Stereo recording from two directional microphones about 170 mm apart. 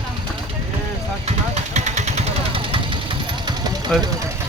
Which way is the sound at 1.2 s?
40° right (ahead or behind).